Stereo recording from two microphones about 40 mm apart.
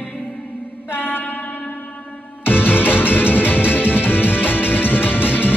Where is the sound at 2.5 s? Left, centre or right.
Left.